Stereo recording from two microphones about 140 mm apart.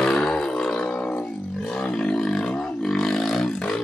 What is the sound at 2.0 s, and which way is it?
Roar, 5° left (ahead or behind).